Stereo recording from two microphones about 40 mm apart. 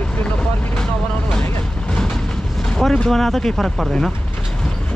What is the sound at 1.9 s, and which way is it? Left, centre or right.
Vehicle, left.